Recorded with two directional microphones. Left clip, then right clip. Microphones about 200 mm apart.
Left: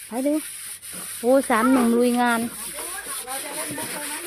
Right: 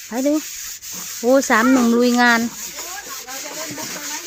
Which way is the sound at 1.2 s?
20° right (ahead or behind).